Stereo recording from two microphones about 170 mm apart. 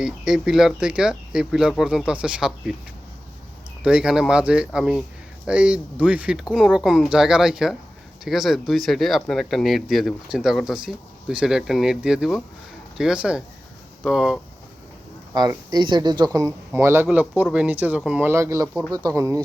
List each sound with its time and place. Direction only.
0.0 s speech: 5° right (ahead or behind)
3.8 s speech: 5° right (ahead or behind)
15.3 s speech: 20° right (ahead or behind)